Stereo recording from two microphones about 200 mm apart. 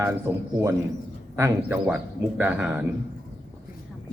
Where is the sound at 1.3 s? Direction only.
10° right (ahead or behind).